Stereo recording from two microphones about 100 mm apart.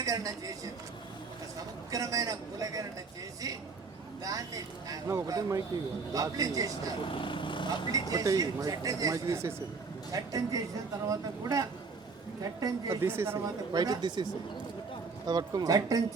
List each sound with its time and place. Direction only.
0.0 s a man's voice: 35° right (ahead or behind)
4.2 s speech: 40° right (ahead or behind)
7.1 s speech: 55° left (ahead or behind)
7.9 s speech: 35° right (ahead or behind)
13.0 s speech: 25° right (ahead or behind)
13.7 s speech: 40° right (ahead or behind)
15.3 s speech: 45° right (ahead or behind)